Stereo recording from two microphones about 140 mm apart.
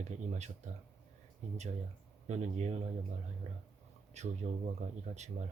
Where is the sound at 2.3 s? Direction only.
55° right (ahead or behind).